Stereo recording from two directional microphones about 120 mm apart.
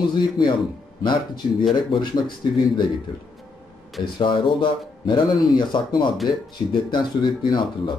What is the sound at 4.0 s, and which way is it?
Speech, 40° left (ahead or behind).